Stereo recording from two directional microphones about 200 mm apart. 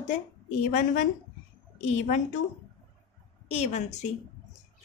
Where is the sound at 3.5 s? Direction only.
35° left (ahead or behind).